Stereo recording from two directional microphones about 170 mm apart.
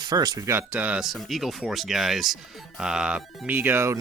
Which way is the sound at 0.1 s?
25° right (ahead or behind).